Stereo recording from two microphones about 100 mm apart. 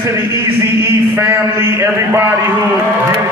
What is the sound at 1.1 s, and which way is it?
A man's voice, 25° right (ahead or behind).